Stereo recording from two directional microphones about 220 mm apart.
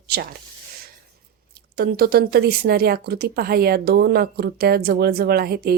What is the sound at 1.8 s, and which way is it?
Speech, 45° right (ahead or behind).